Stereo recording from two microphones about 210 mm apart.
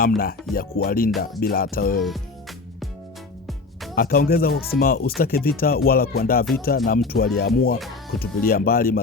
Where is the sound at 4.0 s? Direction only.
45° left (ahead or behind).